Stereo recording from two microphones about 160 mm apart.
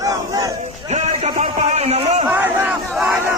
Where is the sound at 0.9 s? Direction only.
45° right (ahead or behind).